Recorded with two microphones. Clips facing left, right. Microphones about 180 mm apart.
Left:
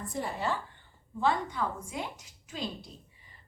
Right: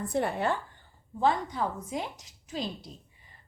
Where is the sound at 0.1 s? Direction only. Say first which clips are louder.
Right 5 dB; 65° right (ahead or behind).